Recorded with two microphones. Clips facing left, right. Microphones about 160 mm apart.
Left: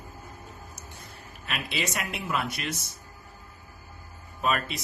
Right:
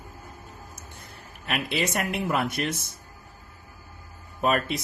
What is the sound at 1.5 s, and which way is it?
Speech, 55° right (ahead or behind).